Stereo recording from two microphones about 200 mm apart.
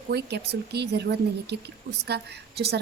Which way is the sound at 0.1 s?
55° right (ahead or behind).